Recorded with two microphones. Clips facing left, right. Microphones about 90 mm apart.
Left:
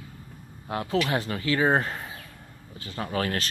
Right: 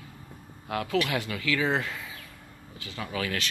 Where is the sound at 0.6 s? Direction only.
30° left (ahead or behind).